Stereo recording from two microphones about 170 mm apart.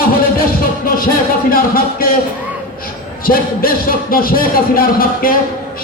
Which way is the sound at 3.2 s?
60° left (ahead or behind).